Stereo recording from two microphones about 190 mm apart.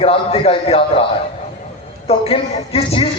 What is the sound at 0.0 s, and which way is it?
A woman's voice, 30° left (ahead or behind).